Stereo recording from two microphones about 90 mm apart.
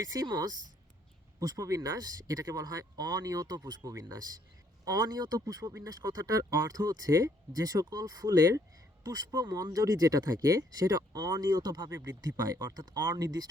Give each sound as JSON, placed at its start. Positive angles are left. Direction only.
{"t": 0.0, "sound": "speech", "side_deg": -45}